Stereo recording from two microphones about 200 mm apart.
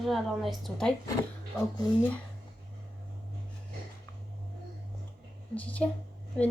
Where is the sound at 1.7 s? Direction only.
20° left (ahead or behind).